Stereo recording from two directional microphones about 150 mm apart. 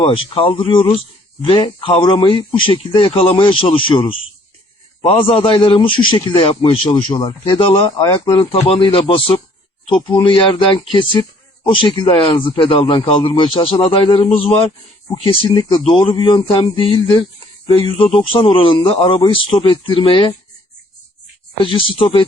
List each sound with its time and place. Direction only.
0.0 s speech: 35° left (ahead or behind)
21.6 s speech: 35° left (ahead or behind)